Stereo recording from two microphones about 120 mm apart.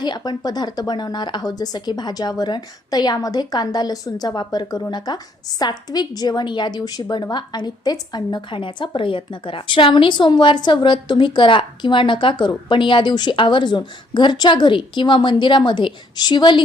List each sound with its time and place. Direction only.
0.0 s a woman's voice: 35° left (ahead or behind)